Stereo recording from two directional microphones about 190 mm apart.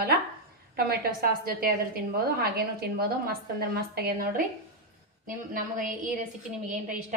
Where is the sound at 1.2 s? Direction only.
50° right (ahead or behind).